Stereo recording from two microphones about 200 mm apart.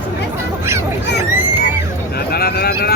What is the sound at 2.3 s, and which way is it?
Speech, 50° left (ahead or behind).